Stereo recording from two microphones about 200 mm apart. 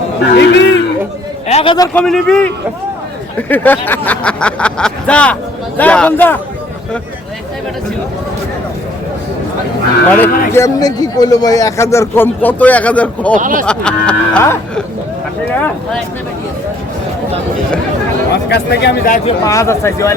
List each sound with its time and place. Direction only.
0.3 s a man's voice: 60° left (ahead or behind)
1.5 s a man's voice: 30° left (ahead or behind)
1.9 s speech: 5° left (ahead or behind)
3.5 s a man's voice: 10° left (ahead or behind)
10.2 s a man's voice: 15° left (ahead or behind)
13.3 s speech: 40° right (ahead or behind)
13.7 s a man's voice: 5° left (ahead or behind)
18.4 s speech: 55° left (ahead or behind)
19.5 s a man's voice: 15° left (ahead or behind)